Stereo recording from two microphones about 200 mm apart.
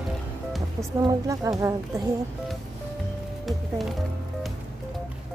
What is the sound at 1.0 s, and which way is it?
Speech, 20° right (ahead or behind).